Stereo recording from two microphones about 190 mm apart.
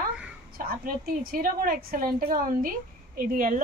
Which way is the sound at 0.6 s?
50° right (ahead or behind).